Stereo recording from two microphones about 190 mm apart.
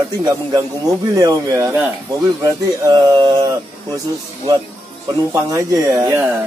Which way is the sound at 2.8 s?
20° right (ahead or behind).